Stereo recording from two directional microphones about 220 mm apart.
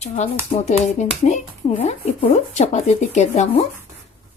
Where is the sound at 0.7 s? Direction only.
35° left (ahead or behind).